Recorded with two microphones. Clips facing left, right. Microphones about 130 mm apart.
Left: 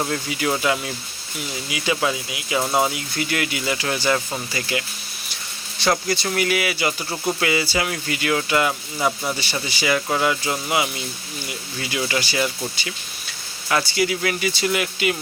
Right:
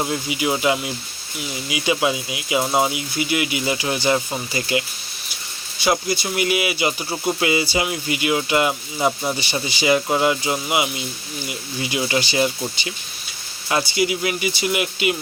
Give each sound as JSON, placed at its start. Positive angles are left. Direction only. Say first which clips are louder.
{"t": 0.0, "sound": "speech", "louder": "right 1 dB", "side_deg": -15}